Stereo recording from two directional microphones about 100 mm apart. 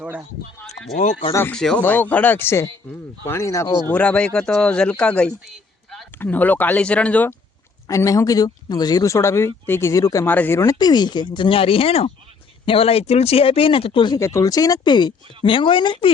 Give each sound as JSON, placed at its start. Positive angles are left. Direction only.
{"t": 1.5, "sound": "speech", "side_deg": 10}
{"t": 3.8, "sound": "speech", "side_deg": 15}
{"t": 5.5, "sound": "a sound", "side_deg": 0}
{"t": 6.1, "sound": "speech", "side_deg": 15}
{"t": 7.9, "sound": "speech", "side_deg": 35}
{"t": 9.9, "sound": "speech", "side_deg": 35}
{"t": 10.2, "sound": "speech", "side_deg": 20}
{"t": 10.7, "sound": "speech", "side_deg": 45}
{"t": 14.2, "sound": "speech", "side_deg": 30}